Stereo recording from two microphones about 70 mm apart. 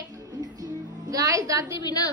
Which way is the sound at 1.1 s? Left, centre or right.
Right.